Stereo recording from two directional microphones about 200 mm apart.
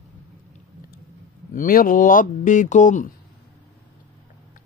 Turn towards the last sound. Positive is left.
turn(degrees=40)  # may be behind; listen again after turning